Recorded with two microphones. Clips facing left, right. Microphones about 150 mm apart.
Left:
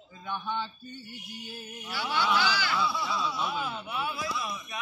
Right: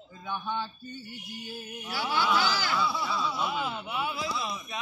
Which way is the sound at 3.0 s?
Centre (ahead or behind).